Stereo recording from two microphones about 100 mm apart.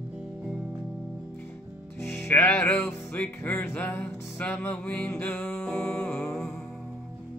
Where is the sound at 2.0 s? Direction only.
20° left (ahead or behind); by 6.5 s 5° left (ahead or behind).